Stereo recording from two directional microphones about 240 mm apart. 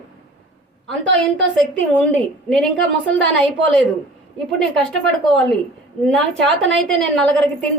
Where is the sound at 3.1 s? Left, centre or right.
Centre.